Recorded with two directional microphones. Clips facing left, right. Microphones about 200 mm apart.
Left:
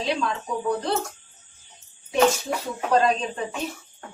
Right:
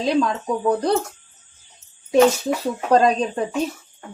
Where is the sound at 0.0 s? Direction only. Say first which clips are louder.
Right 6 dB; 40° right (ahead or behind).